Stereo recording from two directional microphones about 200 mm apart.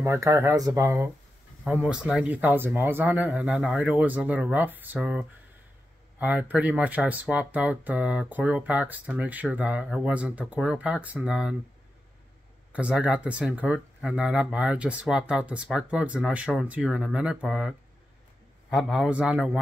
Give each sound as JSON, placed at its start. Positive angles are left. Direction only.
{"t": 0.0, "sound": "speech", "side_deg": -15}
{"t": 1.6, "sound": "speech", "side_deg": -5}
{"t": 12.7, "sound": "speech", "side_deg": -5}